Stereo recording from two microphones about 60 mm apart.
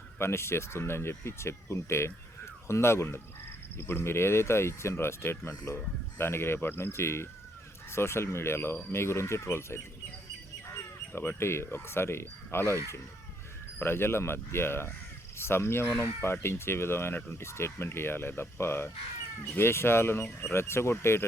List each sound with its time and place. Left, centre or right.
0.2 s speech: left